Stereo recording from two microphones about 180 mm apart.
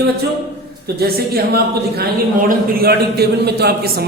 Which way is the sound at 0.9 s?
60° right (ahead or behind).